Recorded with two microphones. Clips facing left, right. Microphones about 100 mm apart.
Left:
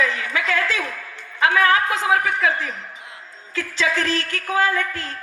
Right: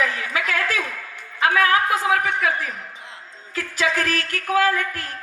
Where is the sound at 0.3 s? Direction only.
30° left (ahead or behind).